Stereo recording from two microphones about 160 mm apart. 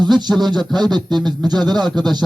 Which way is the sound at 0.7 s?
25° right (ahead or behind).